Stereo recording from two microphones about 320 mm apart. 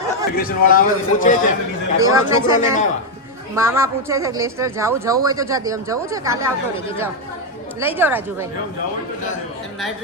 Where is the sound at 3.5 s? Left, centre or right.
Centre.